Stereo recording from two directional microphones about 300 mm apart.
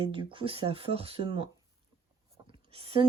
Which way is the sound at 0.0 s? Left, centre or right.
Centre.